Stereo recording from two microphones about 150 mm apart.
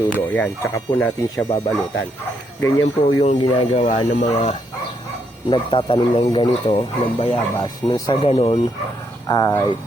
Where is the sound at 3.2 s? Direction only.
45° left (ahead or behind).